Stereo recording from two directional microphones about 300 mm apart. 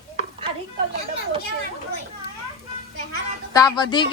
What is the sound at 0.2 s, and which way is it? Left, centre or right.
Chopping, centre.